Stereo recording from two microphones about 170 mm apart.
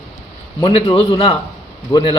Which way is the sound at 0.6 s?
25° left (ahead or behind).